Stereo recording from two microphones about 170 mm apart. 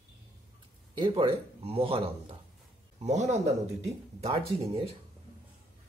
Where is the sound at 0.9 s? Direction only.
30° right (ahead or behind).